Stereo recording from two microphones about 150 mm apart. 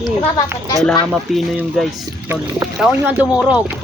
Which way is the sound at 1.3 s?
Centre (ahead or behind).